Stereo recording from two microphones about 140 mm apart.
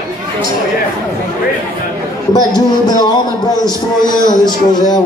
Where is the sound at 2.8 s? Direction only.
30° left (ahead or behind).